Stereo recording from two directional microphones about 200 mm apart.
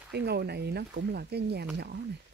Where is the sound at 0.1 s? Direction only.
55° right (ahead or behind).